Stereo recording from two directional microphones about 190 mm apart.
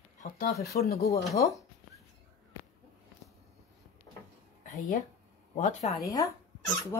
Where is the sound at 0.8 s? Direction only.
55° left (ahead or behind).